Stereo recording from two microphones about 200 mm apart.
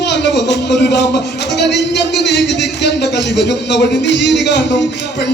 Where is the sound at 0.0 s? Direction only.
60° left (ahead or behind).